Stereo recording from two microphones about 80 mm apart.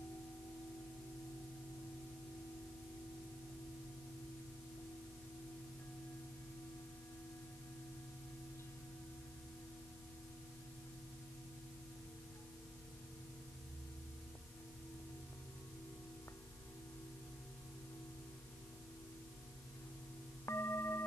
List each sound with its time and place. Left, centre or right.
20.4 s singing bowl: left